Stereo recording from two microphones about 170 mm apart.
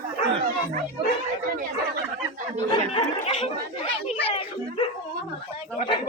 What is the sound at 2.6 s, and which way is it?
Chatter, 30° left (ahead or behind).